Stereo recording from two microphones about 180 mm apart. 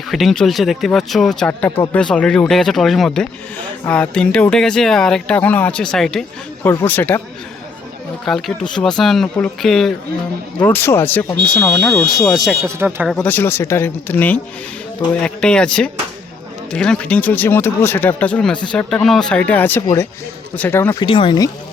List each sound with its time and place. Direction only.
0.1 s speech: centre (ahead or behind)
8.2 s speech: centre (ahead or behind)
12.6 s speech: 10° right (ahead or behind)
13.1 s speech: 5° left (ahead or behind)
21.0 s speech: 25° left (ahead or behind)